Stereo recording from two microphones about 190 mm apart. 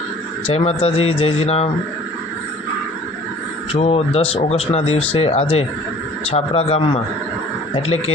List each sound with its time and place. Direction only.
0.4 s speech: 30° left (ahead or behind)
3.7 s speech: 30° left (ahead or behind)